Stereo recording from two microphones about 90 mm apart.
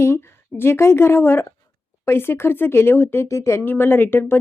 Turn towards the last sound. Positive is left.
turn(degrees=25)  # may be behind; listen again after turning